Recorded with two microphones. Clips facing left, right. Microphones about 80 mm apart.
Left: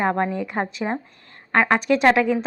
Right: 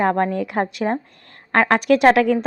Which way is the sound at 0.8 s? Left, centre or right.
Centre.